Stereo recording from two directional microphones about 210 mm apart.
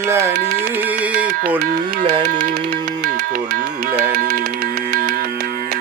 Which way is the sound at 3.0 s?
45° right (ahead or behind).